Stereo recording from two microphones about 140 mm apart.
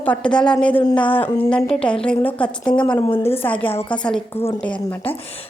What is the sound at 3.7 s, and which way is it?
Speech, 40° left (ahead or behind).